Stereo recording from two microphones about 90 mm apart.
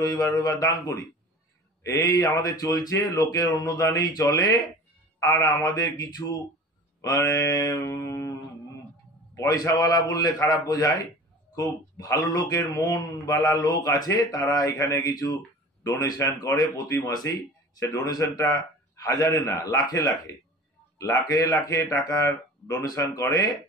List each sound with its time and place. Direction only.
0.0 s a man's voice: 40° left (ahead or behind)
7.8 s music: 30° left (ahead or behind)
9.5 s a man's voice: 45° left (ahead or behind)